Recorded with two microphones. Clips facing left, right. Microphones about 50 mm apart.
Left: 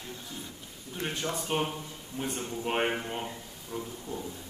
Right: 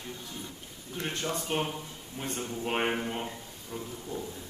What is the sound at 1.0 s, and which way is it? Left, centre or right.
Speech, centre.